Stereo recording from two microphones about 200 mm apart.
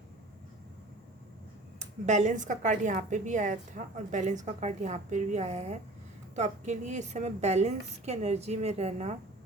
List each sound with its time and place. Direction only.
2.0 s a woman's voice: 35° right (ahead or behind)